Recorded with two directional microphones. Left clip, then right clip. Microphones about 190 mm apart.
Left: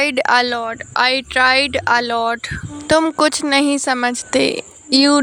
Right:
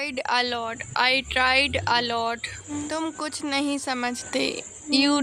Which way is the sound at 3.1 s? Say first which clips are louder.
Left 13 dB; 45° left (ahead or behind).